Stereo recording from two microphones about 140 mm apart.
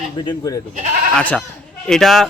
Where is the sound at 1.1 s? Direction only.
10° left (ahead or behind).